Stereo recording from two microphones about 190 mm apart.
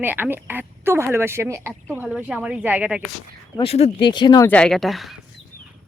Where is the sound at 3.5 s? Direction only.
30° left (ahead or behind).